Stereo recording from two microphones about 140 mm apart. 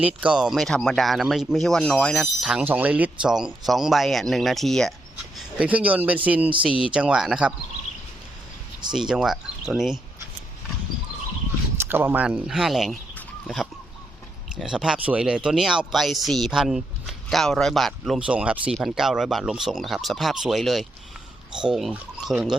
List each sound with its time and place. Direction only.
0.0 s speech: 10° right (ahead or behind)
5.5 s speech: 10° right (ahead or behind)
8.9 s speech: 5° right (ahead or behind)
11.8 s speech: 15° right (ahead or behind)
14.5 s speech: 5° right (ahead or behind)